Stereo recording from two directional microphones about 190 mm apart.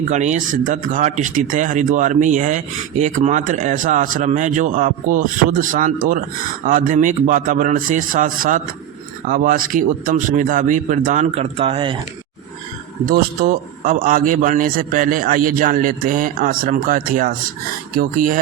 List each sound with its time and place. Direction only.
0.1 s a man's voice: 40° right (ahead or behind)
13.1 s a man's voice: 50° right (ahead or behind)